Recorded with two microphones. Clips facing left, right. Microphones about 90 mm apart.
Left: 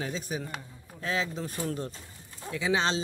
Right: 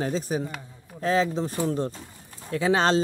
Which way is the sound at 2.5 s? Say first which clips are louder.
Right 6 dB; 45° right (ahead or behind).